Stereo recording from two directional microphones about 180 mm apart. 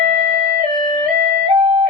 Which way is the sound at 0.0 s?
45° right (ahead or behind).